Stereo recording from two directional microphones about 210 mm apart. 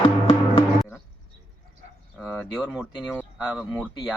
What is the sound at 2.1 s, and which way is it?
Speech, centre (ahead or behind).